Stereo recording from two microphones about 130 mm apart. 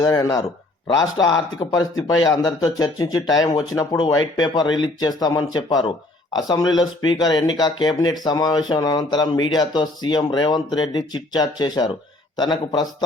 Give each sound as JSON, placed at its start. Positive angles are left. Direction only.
{"t": 0.0, "sound": "speech", "side_deg": 30}